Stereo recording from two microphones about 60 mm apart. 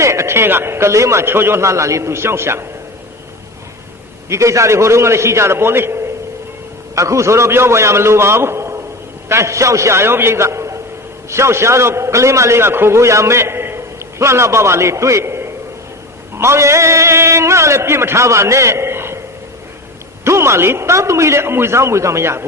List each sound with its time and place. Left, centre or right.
0.0 s a man's voice: right
4.3 s a man's voice: right
6.9 s a man's voice: right
20.2 s a man's voice: right